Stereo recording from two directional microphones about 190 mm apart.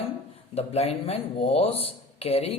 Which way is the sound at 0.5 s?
30° left (ahead or behind).